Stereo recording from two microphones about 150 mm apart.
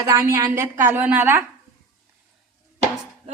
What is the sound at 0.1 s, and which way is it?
A woman's voice, 20° right (ahead or behind).